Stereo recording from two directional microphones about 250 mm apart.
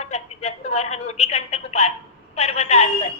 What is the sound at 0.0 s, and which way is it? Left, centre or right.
Telephone, left.